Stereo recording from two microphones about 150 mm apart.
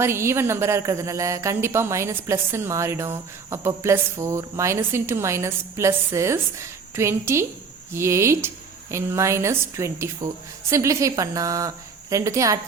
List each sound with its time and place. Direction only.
0.0 s a woman's voice: 15° right (ahead or behind)